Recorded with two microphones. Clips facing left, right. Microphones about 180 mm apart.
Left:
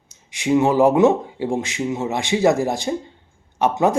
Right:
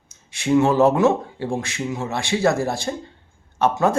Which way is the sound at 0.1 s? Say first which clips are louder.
Even; 15° left (ahead or behind).